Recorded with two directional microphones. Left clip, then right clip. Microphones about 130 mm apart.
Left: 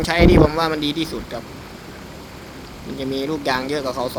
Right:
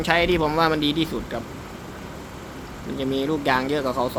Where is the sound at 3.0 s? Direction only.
25° left (ahead or behind).